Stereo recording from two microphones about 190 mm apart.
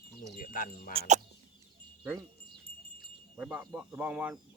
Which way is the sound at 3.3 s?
5° right (ahead or behind).